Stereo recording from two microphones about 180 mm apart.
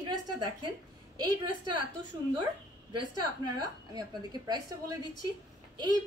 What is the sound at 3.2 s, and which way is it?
A woman's voice, 25° right (ahead or behind).